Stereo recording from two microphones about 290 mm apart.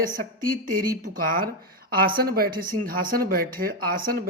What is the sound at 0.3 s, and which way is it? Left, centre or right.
A man's voice, right.